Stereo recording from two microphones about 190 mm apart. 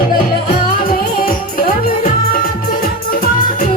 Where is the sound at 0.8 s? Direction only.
50° left (ahead or behind).